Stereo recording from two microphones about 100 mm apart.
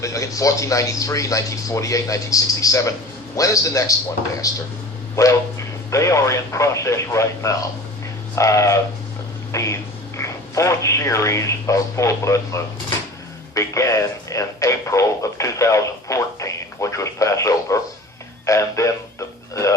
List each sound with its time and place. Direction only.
0.0 s speech: 35° left (ahead or behind)